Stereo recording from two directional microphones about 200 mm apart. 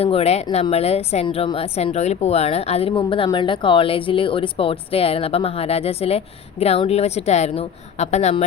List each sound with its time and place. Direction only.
0.0 s a woman's voice: 30° left (ahead or behind)